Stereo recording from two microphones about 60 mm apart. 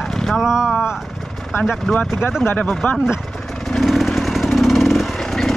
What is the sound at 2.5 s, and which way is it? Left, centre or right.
Speech, left.